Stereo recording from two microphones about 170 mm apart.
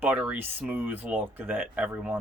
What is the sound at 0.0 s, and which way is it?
Speech, 10° right (ahead or behind).